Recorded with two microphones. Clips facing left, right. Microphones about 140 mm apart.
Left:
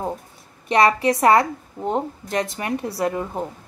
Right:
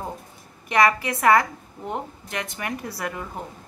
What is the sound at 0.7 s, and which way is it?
A woman's voice, 30° left (ahead or behind).